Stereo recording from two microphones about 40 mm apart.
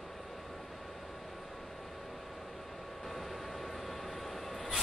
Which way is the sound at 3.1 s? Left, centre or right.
Centre.